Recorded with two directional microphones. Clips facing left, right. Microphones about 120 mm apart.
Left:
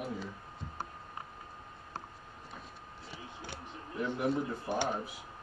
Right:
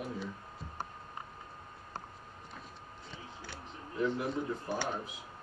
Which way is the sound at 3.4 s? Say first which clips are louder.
Left 1 dB; 15° left (ahead or behind).